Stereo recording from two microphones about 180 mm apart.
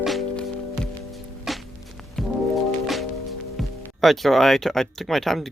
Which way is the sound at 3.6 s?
Centre (ahead or behind).